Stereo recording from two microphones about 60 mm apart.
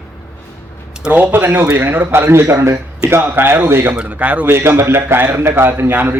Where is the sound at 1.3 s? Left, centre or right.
Right.